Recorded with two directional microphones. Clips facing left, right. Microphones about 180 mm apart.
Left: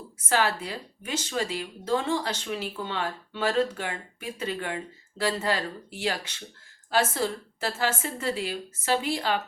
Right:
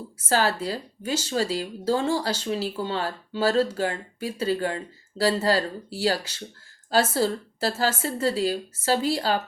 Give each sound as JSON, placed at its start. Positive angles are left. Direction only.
{"t": 0.3, "sound": "speech", "side_deg": -35}